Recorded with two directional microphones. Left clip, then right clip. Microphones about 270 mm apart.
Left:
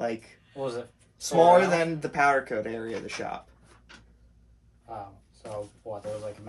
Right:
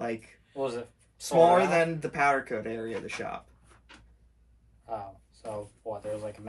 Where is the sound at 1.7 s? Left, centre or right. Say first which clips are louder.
Even; centre.